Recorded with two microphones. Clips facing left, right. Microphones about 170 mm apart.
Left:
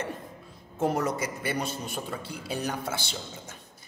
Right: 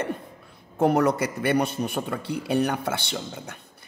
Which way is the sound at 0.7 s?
65° right (ahead or behind).